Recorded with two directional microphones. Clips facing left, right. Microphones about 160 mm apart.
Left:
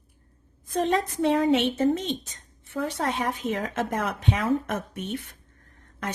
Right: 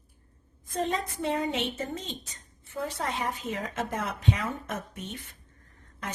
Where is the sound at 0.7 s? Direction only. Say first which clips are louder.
Left 6 dB; 85° left; by 5.3 s 65° left (ahead or behind).